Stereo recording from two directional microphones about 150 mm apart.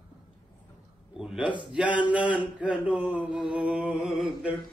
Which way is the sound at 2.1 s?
10° right (ahead or behind).